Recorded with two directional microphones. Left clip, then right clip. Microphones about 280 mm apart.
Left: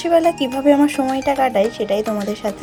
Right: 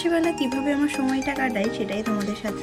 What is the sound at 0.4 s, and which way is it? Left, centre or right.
Speech, centre.